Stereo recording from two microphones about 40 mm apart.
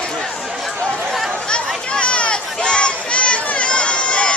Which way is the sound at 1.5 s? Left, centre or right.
Left.